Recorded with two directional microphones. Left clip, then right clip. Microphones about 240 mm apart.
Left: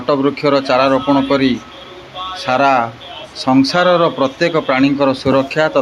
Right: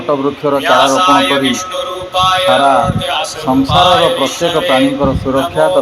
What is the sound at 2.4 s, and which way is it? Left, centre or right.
A man's voice, centre.